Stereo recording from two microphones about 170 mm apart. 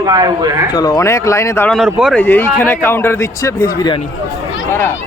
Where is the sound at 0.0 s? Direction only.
20° right (ahead or behind).